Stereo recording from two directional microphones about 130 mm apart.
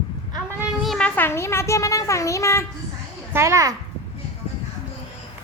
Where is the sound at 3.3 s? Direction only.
25° right (ahead or behind).